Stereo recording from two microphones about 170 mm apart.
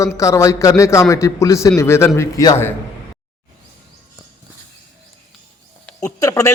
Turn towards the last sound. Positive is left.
turn(degrees=20)  # may be behind; listen again after turning